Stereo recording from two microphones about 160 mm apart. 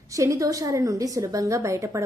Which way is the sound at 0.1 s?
20° right (ahead or behind).